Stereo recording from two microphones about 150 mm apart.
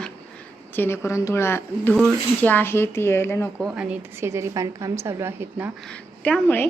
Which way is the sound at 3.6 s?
5° right (ahead or behind).